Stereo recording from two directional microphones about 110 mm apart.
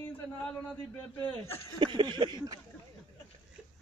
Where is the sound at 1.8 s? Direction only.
50° right (ahead or behind).